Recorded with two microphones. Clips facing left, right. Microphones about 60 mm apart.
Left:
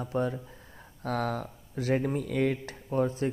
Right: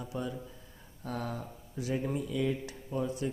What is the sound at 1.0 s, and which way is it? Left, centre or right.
Speech, left.